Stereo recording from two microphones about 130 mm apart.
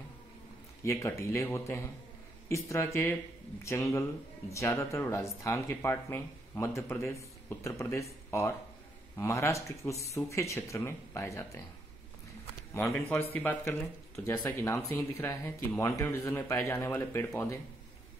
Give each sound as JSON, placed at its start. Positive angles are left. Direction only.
{"t": 0.8, "sound": "speech", "side_deg": 20}
{"t": 12.7, "sound": "speech", "side_deg": 10}